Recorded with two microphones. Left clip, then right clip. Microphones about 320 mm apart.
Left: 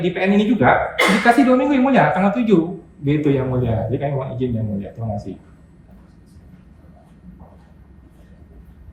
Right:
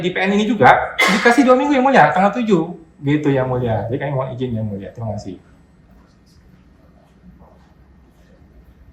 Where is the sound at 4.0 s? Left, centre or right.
Centre.